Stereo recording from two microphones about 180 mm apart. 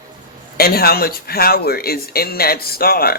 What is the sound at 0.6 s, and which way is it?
Speech, 60° left (ahead or behind).